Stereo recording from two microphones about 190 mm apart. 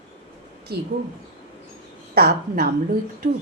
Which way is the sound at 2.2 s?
55° right (ahead or behind).